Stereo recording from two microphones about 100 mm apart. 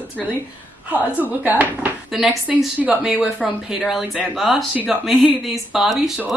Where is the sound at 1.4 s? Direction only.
15° right (ahead or behind).